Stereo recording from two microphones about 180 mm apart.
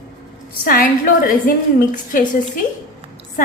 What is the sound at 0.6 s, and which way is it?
Speech, 50° left (ahead or behind).